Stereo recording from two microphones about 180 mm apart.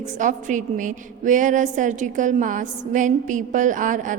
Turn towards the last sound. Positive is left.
turn(degrees=-45)  # may be behind; listen again after turning